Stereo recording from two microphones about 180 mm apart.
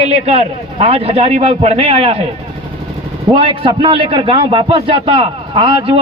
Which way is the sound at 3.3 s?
30° right (ahead or behind).